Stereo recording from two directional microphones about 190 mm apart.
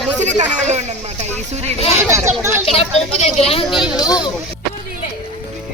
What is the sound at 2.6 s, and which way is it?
A woman's voice, 30° left (ahead or behind).